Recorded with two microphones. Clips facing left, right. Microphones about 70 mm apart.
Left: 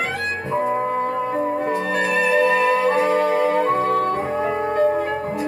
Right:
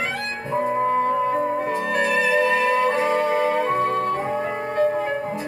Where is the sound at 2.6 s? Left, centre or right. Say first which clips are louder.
Left 2 dB; centre.